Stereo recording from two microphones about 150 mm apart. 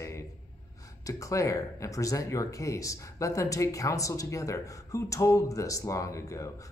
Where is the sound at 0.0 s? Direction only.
20° left (ahead or behind).